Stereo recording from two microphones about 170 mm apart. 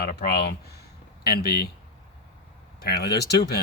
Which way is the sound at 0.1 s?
65° left (ahead or behind).